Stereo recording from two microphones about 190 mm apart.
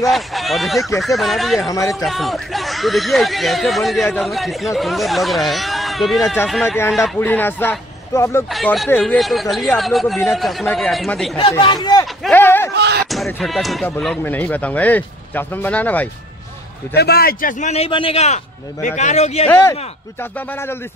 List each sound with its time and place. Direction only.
0.1 s speech: centre (ahead or behind)
1.7 s speech: 15° left (ahead or behind)
2.0 s speech: centre (ahead or behind)
8.5 s speech: centre (ahead or behind)
11.6 s speech: 25° left (ahead or behind)
12.2 s a sound: 10° left (ahead or behind)
12.7 s a sound: 65° right (ahead or behind)
13.1 s speech: centre (ahead or behind)
16.9 s a man's voice: 55° left (ahead or behind); by 19.4 s 35° left (ahead or behind)
19.5 s speech: 15° left (ahead or behind)